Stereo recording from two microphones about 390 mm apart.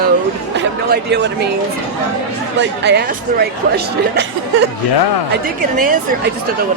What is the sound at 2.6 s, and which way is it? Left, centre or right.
Speech, right.